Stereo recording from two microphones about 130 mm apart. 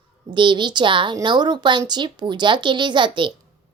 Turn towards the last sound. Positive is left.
turn(degrees=-40)  # may be behind; listen again after turning